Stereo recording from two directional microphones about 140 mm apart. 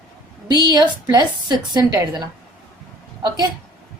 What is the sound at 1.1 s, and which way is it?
A woman's voice, 30° right (ahead or behind).